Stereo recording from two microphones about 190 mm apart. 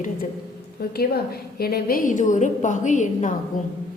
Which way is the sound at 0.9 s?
55° left (ahead or behind).